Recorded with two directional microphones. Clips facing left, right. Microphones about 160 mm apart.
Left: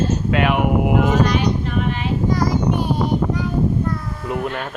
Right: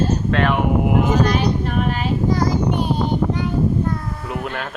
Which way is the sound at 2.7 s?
25° right (ahead or behind).